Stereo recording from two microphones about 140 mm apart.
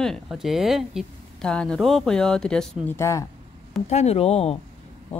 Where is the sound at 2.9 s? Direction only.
20° left (ahead or behind).